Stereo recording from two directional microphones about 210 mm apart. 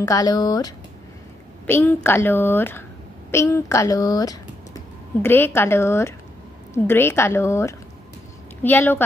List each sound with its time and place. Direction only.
0.0 s a woman's voice: 15° left (ahead or behind)